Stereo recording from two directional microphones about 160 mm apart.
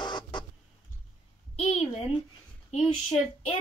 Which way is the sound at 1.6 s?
40° left (ahead or behind).